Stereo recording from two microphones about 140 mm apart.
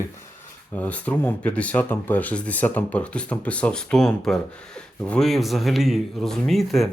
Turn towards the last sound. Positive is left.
turn(degrees=0)  # may be behind; listen again after turning